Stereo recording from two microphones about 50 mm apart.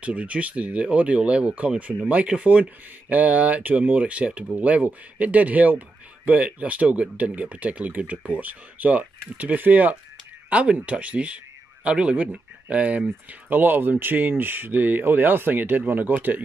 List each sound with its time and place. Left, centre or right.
0.0 s speech: right